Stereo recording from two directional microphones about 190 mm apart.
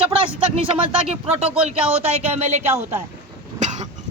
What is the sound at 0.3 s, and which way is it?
Speech, 30° right (ahead or behind).